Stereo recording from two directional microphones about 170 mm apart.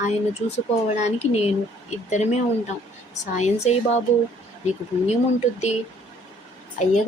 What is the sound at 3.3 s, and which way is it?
Speech, 40° left (ahead or behind).